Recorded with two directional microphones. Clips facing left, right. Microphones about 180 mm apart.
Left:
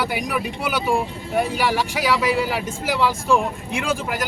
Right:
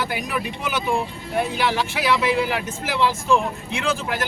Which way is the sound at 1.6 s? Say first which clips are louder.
Left 1 dB; 10° left (ahead or behind).